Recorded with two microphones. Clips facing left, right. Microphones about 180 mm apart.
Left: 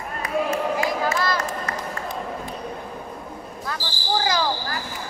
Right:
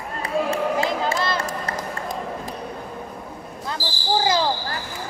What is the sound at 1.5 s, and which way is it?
Run, 40° right (ahead or behind).